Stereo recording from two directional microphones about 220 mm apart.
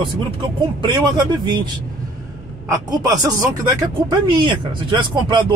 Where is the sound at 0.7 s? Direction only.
20° right (ahead or behind).